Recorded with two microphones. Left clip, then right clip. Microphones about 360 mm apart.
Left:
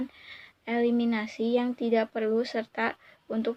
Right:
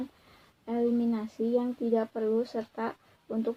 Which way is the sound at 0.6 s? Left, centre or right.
Left.